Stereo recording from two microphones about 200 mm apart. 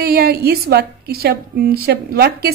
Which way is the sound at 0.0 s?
50° right (ahead or behind).